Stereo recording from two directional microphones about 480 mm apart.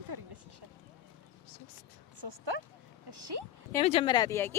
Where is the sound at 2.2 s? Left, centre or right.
Right.